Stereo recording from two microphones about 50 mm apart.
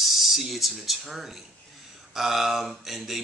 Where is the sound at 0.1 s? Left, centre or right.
Centre.